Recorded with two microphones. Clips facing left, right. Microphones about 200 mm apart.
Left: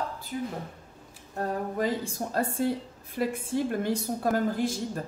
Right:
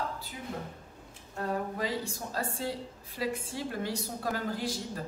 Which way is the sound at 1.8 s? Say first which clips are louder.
Left 5 dB; 50° left (ahead or behind).